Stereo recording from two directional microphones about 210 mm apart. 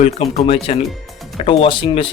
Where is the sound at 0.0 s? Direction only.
30° left (ahead or behind).